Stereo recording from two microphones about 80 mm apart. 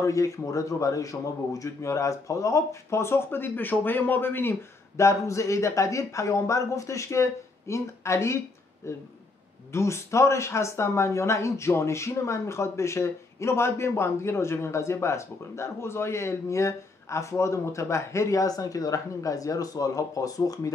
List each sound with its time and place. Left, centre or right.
0.0 s speech: left